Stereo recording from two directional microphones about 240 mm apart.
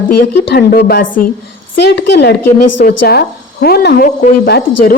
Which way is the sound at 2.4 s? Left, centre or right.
Left.